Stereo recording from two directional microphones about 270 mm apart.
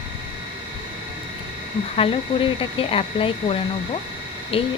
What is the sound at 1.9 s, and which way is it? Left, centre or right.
Speech, centre.